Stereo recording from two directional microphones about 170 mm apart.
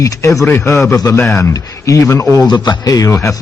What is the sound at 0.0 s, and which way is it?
A man's voice, 15° left (ahead or behind).